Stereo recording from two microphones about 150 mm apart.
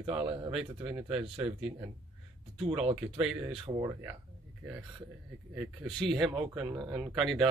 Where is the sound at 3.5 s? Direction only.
40° right (ahead or behind).